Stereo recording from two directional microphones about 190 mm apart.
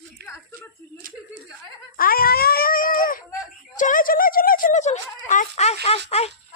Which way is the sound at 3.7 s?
45° left (ahead or behind).